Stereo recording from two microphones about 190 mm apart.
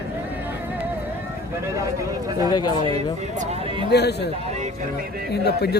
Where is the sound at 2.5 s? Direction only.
20° left (ahead or behind).